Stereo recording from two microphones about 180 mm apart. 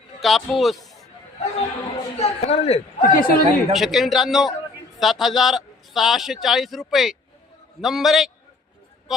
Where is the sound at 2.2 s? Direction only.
35° left (ahead or behind).